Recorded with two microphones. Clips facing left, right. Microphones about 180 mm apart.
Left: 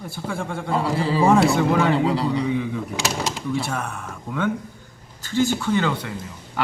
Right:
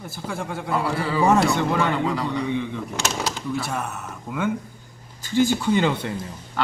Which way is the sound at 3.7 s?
5° right (ahead or behind).